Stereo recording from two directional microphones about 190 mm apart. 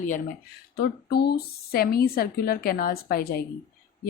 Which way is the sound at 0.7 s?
55° left (ahead or behind).